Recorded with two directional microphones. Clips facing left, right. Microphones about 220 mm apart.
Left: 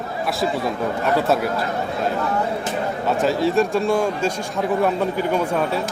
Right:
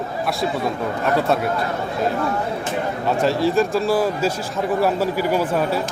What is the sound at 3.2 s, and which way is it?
A man's voice, centre (ahead or behind).